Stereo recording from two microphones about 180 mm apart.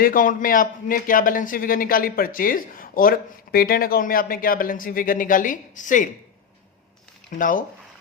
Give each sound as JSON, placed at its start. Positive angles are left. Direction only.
{"t": 0.0, "sound": "a man's voice", "side_deg": 50}
{"t": 7.3, "sound": "a man's voice", "side_deg": 45}